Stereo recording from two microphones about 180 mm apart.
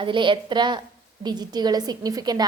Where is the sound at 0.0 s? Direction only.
25° right (ahead or behind).